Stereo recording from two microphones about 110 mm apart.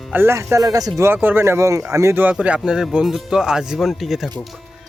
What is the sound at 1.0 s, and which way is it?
Speech, 20° right (ahead or behind).